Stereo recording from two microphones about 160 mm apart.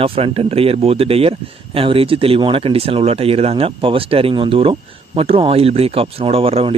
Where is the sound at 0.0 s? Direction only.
35° right (ahead or behind).